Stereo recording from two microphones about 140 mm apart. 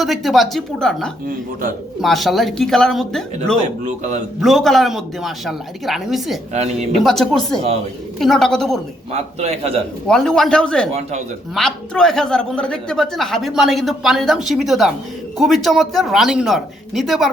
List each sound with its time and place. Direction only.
0.0 s a woman's voice: centre (ahead or behind)
3.6 s a man's voice: 60° right (ahead or behind)
4.4 s a woman's voice: centre (ahead or behind)
9.1 s a man's voice: 50° right (ahead or behind)
10.1 s a woman's voice: 5° left (ahead or behind)